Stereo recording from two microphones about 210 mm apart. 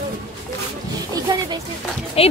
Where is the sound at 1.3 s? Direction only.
20° right (ahead or behind).